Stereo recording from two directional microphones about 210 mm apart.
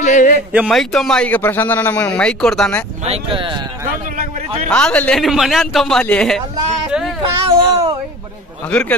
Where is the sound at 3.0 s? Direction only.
25° right (ahead or behind).